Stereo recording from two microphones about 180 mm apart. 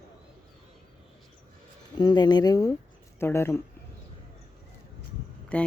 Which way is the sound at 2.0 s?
25° left (ahead or behind).